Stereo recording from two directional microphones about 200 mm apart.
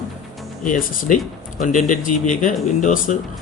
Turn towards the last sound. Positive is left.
turn(degrees=40)  # may be behind; listen again after turning